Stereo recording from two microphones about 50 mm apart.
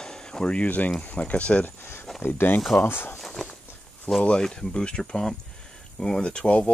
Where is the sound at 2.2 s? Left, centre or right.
Left.